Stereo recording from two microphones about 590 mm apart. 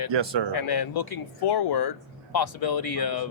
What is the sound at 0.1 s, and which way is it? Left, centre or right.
Speech, right.